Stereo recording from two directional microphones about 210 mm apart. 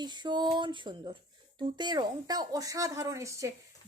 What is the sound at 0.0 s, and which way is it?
Speech, 20° right (ahead or behind).